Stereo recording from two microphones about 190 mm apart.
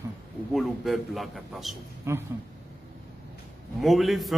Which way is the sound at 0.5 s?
Centre (ahead or behind).